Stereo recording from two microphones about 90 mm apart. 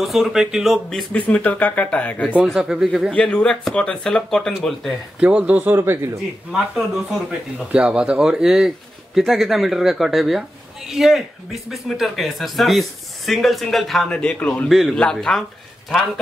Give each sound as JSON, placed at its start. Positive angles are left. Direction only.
{"t": 0.0, "sound": "a man's voice", "side_deg": 0}
{"t": 1.1, "sound": "speech", "side_deg": 15}
{"t": 2.4, "sound": "a man's voice", "side_deg": -5}
{"t": 3.1, "sound": "speech", "side_deg": 10}
{"t": 5.2, "sound": "speech", "side_deg": -15}
{"t": 6.5, "sound": "a man's voice", "side_deg": -5}
{"t": 14.1, "sound": "speech", "side_deg": 15}
{"t": 14.7, "sound": "a man's voice", "side_deg": 0}
{"t": 15.9, "sound": "speech", "side_deg": -10}